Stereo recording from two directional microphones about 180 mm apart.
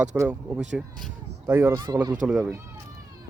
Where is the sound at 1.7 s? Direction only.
25° right (ahead or behind).